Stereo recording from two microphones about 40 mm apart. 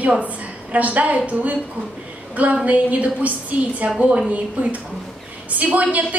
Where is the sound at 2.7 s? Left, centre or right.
Right.